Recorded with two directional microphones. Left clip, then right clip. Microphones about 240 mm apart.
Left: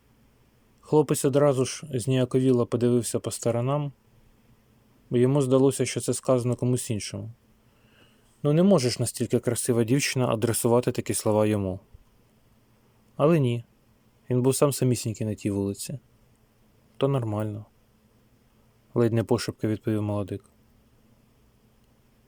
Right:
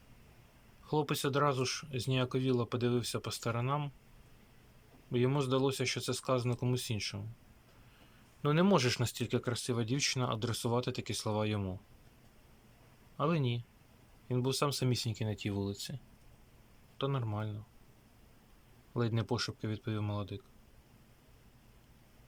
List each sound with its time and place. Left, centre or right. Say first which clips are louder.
0.9 s speech: left 11 dB; left
5.1 s speech: left 10 dB; left
8.4 s speech: left 8 dB; centre
13.1 s speech: left 12 dB; left
17.0 s speech: left 11 dB; left
18.9 s speech: left 12 dB; left